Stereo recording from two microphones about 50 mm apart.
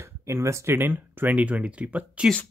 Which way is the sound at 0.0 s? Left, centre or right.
Right.